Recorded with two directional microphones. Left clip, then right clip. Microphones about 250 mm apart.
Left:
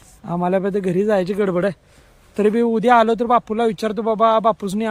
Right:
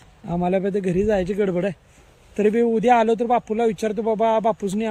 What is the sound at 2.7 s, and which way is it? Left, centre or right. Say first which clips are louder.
Speech: left 3 dB; centre.